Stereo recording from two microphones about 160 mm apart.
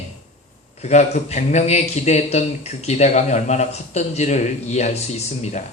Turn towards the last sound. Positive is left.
turn(degrees=45)  # may be behind; listen again after turning